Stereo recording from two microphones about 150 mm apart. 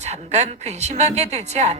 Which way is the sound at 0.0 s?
50° right (ahead or behind).